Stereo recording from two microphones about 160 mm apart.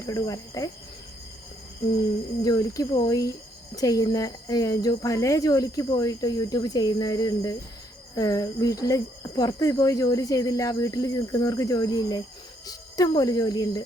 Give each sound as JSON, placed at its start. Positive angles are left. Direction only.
{"t": 0.0, "sound": "speech", "side_deg": 20}
{"t": 2.4, "sound": "speech", "side_deg": 25}